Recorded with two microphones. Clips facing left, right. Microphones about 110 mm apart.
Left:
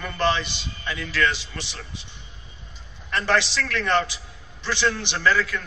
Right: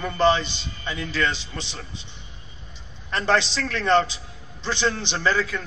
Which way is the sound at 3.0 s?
20° right (ahead or behind).